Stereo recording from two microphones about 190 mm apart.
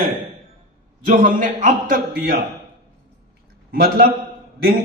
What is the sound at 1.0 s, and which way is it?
Speech, 45° right (ahead or behind).